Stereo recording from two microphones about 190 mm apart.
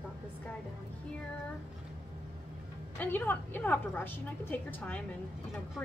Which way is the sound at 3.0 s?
10° left (ahead or behind).